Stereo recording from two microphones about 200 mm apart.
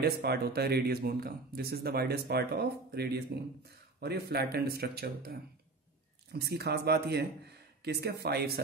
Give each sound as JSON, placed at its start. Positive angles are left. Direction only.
{"t": 0.0, "sound": "a man's voice", "side_deg": -55}